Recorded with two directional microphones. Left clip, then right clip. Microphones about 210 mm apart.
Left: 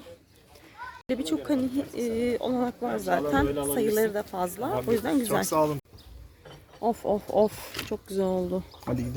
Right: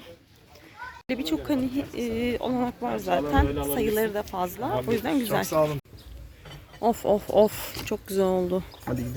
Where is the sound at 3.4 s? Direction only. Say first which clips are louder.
Left 1 dB; 55° left (ahead or behind).